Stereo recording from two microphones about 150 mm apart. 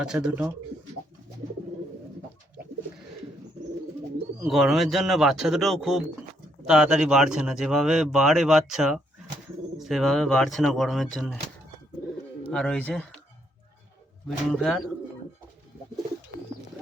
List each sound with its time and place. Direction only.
0.0 s speech: 5° right (ahead or behind)
4.4 s speech: centre (ahead or behind)
12.5 s speech: 5° left (ahead or behind)
14.3 s speech: centre (ahead or behind)